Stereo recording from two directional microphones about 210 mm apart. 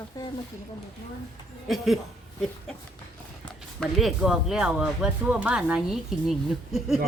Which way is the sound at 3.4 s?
Centre (ahead or behind).